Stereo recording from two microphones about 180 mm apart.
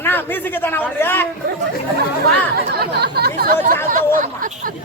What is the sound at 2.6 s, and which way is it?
Chatter, 60° right (ahead or behind).